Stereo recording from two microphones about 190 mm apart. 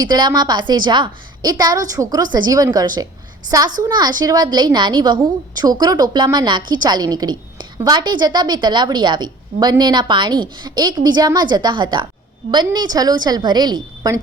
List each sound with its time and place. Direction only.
0.0 s a woman's voice: 20° right (ahead or behind)